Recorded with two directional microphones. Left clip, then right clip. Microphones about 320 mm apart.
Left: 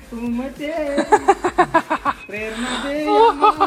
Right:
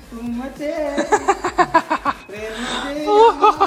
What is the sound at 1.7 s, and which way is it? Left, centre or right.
Speech, centre.